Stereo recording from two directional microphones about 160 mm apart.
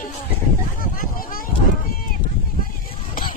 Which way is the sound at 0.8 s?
60° left (ahead or behind).